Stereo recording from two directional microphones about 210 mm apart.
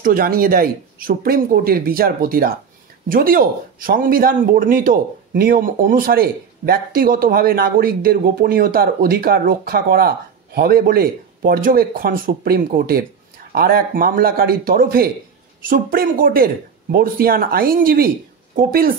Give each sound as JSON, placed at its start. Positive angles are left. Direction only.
{"t": 0.0, "sound": "speech", "side_deg": -45}